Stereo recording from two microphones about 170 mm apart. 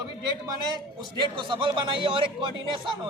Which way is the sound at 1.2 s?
30° right (ahead or behind).